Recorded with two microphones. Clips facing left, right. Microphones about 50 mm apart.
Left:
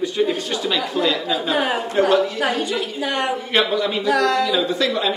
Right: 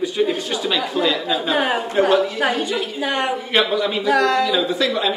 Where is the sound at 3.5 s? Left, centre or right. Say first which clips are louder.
Right 1 dB; centre.